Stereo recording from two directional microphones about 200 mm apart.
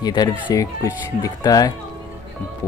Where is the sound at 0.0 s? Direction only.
20° left (ahead or behind).